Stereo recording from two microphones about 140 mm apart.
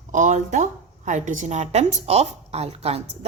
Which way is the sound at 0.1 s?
60° right (ahead or behind).